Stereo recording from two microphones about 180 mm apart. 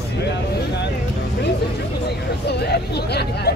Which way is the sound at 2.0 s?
65° left (ahead or behind).